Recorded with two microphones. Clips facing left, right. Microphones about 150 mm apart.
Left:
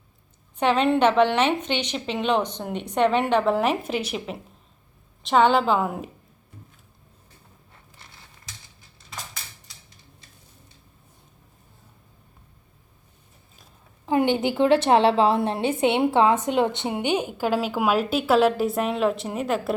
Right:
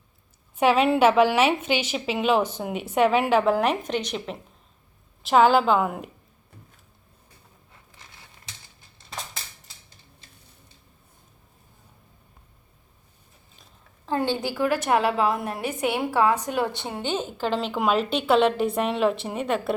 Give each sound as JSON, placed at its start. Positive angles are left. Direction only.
{"t": 0.5, "sound": "a woman's voice", "side_deg": -10}
{"t": 14.0, "sound": "a woman's voice", "side_deg": 15}